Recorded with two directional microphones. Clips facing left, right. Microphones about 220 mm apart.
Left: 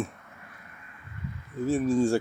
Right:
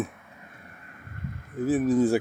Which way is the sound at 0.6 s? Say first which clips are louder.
Right 3 dB; 45° right (ahead or behind).